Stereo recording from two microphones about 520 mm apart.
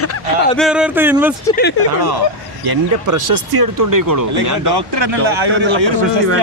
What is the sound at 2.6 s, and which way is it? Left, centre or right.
A man's voice, right.